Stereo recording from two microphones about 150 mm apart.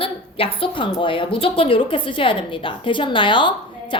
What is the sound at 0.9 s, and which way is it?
A woman's voice, 35° left (ahead or behind).